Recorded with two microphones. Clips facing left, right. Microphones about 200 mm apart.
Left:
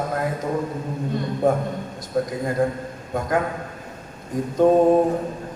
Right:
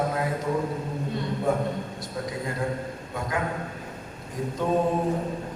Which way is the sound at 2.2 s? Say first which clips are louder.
Left 10 dB; 50° left (ahead or behind).